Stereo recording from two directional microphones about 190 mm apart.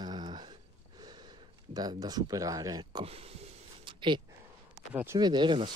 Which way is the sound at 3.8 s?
25° right (ahead or behind).